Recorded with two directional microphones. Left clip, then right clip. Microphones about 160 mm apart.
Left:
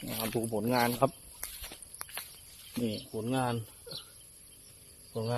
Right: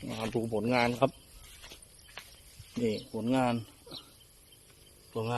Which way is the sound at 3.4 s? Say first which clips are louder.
Right 3 dB; 35° right (ahead or behind).